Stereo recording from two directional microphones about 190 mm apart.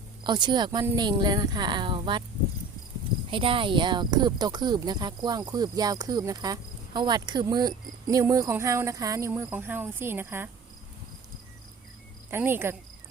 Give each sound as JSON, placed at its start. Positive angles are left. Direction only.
{"t": 0.3, "sound": "speech", "side_deg": -25}
{"t": 3.2, "sound": "speech", "side_deg": -25}
{"t": 12.3, "sound": "speech", "side_deg": -10}